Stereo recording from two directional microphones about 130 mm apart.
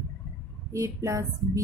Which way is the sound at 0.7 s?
25° right (ahead or behind).